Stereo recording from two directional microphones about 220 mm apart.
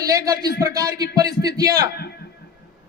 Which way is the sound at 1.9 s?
45° left (ahead or behind).